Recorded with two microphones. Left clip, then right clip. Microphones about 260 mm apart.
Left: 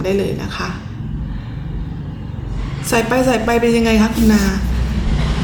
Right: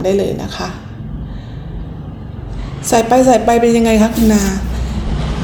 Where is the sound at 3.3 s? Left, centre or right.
Centre.